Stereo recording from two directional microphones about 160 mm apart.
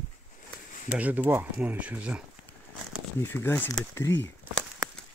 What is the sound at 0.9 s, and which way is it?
Speech, 10° right (ahead or behind).